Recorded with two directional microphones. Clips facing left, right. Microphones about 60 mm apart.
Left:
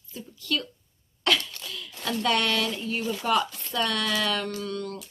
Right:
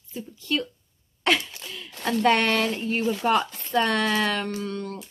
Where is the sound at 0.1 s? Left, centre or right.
Right.